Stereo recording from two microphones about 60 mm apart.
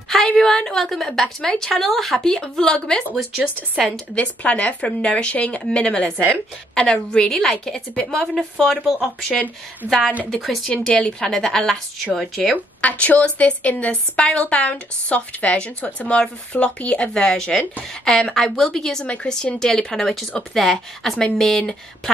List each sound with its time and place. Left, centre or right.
0.4 s speech: centre
1.8 s speech: centre
3.2 s a woman's voice: centre
4.1 s speech: centre
8.5 s a woman's voice: centre
12.8 s a woman's voice: left